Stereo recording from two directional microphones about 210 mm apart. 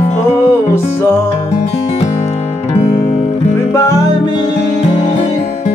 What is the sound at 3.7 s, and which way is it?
Music, 15° left (ahead or behind).